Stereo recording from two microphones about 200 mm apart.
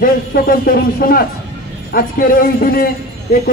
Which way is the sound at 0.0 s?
45° left (ahead or behind).